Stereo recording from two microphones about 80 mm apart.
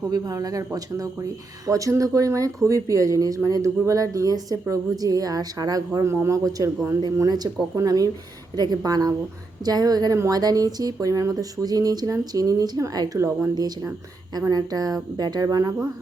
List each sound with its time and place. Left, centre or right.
0.1 s speech: right
7.2 s speech: right
13.6 s speech: right